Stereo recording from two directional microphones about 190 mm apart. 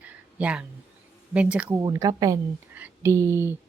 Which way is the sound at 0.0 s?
5° right (ahead or behind).